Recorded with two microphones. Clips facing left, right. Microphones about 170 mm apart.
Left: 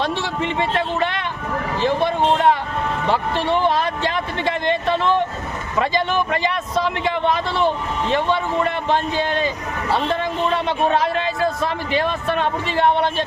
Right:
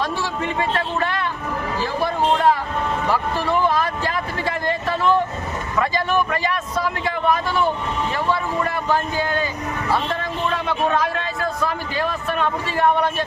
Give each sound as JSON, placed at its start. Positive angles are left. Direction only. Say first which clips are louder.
{"t": 0.4, "sound": "speech", "louder": "left 2 dB", "side_deg": 25}
{"t": 1.8, "sound": "a sound", "louder": "left 4 dB", "side_deg": 25}
{"t": 5.8, "sound": "a man's voice", "louder": "left 1 dB", "side_deg": 20}
{"t": 10.9, "sound": "a man's voice", "louder": "left 3 dB", "side_deg": 25}